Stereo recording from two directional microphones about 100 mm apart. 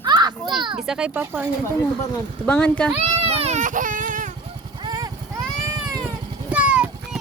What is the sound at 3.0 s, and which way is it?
Speech, 90° right.